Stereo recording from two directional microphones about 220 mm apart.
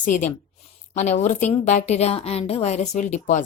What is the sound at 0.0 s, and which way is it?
Speech, 35° left (ahead or behind).